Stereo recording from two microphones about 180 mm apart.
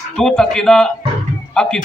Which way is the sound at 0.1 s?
Centre (ahead or behind).